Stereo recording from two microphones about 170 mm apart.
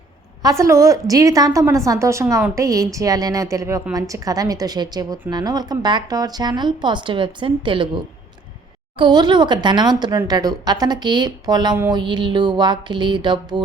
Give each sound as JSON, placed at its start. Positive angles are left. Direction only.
{"t": 0.4, "sound": "a woman's voice", "side_deg": -20}